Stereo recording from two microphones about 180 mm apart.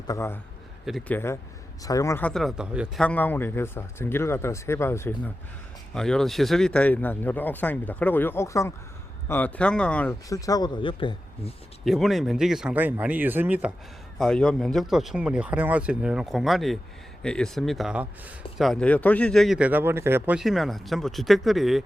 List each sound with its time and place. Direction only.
0.1 s speech: 15° left (ahead or behind)
0.9 s a man's voice: 5° left (ahead or behind)
3.0 s speech: 10° left (ahead or behind)
10.2 s speech: 20° left (ahead or behind)
11.9 s speech: centre (ahead or behind)
14.2 s a man's voice: 5° left (ahead or behind)